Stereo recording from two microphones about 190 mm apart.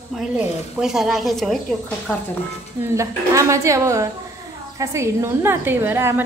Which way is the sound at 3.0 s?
15° right (ahead or behind).